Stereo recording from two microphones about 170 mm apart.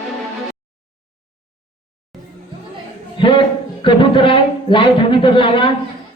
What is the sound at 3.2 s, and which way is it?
A man's voice, 30° left (ahead or behind).